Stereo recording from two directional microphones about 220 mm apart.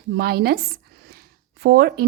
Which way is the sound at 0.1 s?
45° right (ahead or behind).